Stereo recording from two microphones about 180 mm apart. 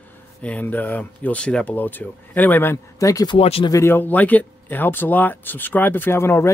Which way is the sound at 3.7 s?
15° left (ahead or behind).